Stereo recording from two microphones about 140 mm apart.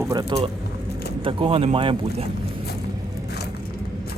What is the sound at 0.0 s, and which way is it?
Speech, 30° right (ahead or behind).